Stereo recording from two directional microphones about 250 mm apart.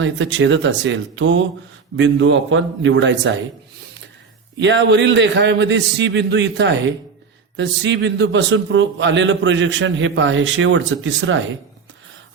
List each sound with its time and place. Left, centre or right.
0.0 s a man's voice: right
4.6 s a man's voice: right